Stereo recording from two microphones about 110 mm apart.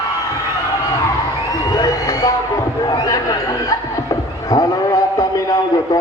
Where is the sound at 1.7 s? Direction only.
35° left (ahead or behind).